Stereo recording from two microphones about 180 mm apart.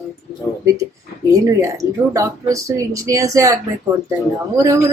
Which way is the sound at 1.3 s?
20° right (ahead or behind).